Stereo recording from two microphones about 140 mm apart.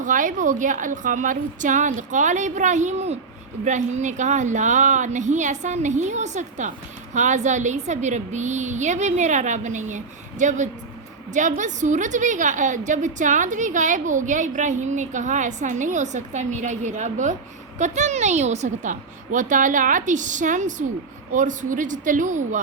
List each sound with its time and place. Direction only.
0.0 s a woman's voice: 70° right (ahead or behind)